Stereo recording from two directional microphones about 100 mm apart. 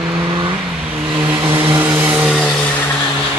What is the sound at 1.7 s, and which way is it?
Vehicle, 20° right (ahead or behind).